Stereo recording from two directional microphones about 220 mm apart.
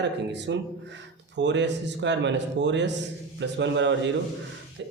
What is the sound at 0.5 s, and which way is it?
Speech, 55° right (ahead or behind).